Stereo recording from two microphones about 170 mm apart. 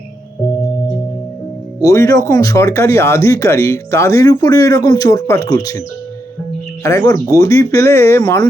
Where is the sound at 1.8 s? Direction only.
20° left (ahead or behind).